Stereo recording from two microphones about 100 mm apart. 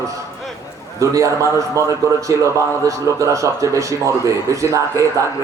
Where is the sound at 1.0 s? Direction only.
35° right (ahead or behind).